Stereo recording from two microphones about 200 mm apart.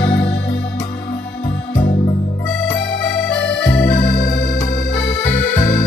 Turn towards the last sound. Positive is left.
turn(degrees=55)  # may be behind; listen again after turning